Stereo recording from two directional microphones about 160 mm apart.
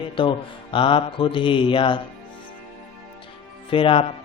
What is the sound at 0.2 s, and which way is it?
Speech, 30° left (ahead or behind).